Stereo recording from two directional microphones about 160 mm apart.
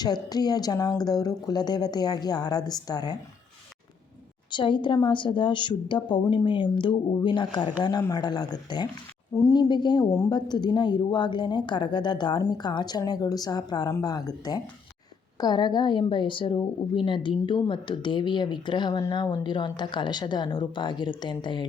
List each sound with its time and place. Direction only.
0.0 s a woman's voice: 25° left (ahead or behind)
4.5 s a woman's voice: 30° left (ahead or behind)